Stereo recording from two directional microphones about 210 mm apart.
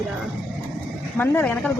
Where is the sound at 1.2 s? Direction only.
10° left (ahead or behind).